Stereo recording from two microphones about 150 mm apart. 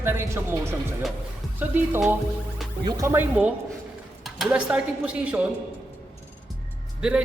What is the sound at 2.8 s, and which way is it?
Speech, 20° right (ahead or behind).